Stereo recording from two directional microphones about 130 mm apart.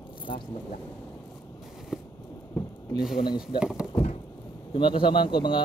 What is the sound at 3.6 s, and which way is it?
Speech, 5° right (ahead or behind).